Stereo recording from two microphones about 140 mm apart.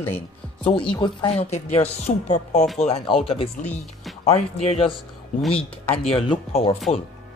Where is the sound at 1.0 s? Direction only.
40° left (ahead or behind).